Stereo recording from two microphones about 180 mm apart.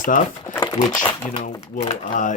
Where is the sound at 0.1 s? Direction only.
50° left (ahead or behind).